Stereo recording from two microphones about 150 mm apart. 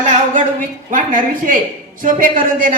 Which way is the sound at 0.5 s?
60° right (ahead or behind).